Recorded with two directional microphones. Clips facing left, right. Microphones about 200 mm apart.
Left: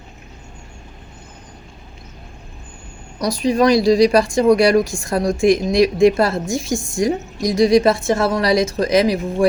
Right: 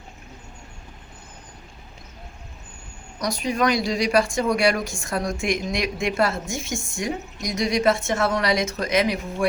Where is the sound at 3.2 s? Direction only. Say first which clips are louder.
Left 7 dB; 35° left (ahead or behind).